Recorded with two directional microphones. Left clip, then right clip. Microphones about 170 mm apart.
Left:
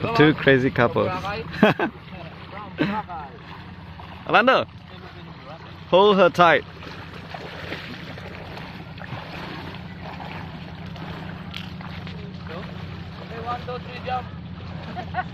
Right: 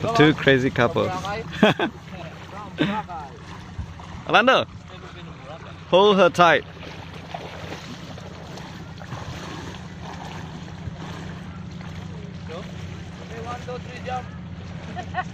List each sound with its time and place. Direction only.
0.1 s speech: centre (ahead or behind)
2.5 s boat: centre (ahead or behind)
4.3 s speech: 5° left (ahead or behind)
5.9 s speech: 5° left (ahead or behind)
7.3 s boat: 60° left (ahead or behind)
13.3 s vehicle: 50° left (ahead or behind)